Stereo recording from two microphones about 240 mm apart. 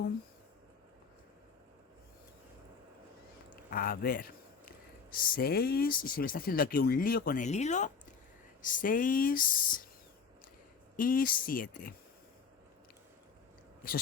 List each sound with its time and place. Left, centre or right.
3.7 s speech: left
5.3 s speech: left
10.9 s speech: left